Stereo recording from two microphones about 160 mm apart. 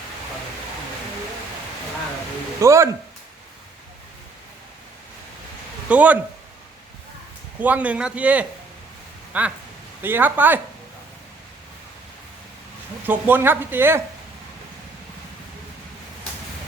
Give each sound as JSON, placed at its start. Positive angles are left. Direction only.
{"t": 2.6, "sound": "speech", "side_deg": -20}
{"t": 5.9, "sound": "speech", "side_deg": -10}
{"t": 7.6, "sound": "speech", "side_deg": -10}
{"t": 13.1, "sound": "speech", "side_deg": -10}